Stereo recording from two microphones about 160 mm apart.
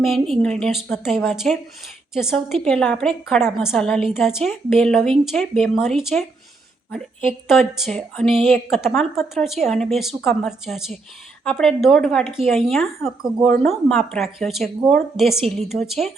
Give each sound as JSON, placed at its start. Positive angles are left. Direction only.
{"t": 0.0, "sound": "a woman's voice", "side_deg": 0}
{"t": 7.4, "sound": "a woman's voice", "side_deg": 0}